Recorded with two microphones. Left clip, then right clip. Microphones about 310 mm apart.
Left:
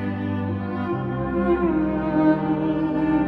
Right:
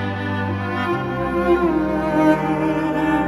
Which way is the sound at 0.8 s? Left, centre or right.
Right.